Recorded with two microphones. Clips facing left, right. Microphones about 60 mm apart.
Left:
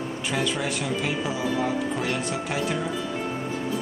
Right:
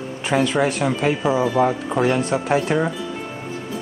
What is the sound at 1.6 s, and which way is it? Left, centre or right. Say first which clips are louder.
Speech: right 7 dB; right.